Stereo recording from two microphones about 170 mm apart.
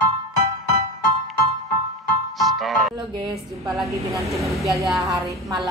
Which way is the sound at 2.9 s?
25° right (ahead or behind).